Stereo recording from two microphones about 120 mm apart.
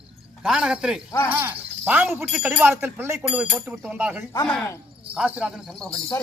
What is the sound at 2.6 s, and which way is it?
A man's voice, 20° right (ahead or behind).